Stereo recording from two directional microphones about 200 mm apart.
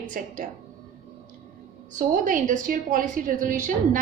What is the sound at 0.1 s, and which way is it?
Speech, 45° right (ahead or behind).